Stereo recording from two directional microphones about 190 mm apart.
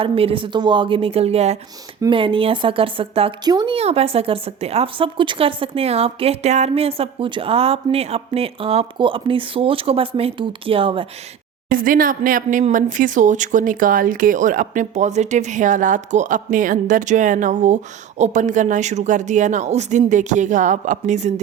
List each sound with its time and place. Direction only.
0.0 s speech: 30° right (ahead or behind)
11.7 s speech: 45° right (ahead or behind)